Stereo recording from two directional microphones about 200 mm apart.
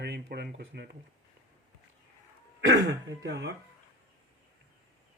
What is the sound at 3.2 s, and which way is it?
Speech, 60° right (ahead or behind).